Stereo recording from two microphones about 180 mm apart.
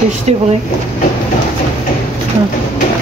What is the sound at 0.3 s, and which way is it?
Speech, 40° right (ahead or behind).